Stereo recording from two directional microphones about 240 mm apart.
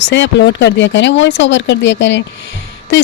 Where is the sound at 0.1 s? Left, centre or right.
Left.